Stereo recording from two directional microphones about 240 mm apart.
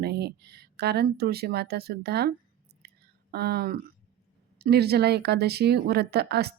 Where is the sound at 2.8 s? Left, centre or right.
Right.